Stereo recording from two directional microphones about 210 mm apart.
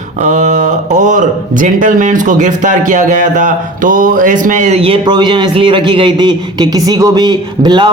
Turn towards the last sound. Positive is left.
turn(degrees=-20)  # may be behind; listen again after turning